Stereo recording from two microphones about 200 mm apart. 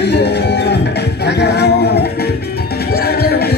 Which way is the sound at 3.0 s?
50° left (ahead or behind).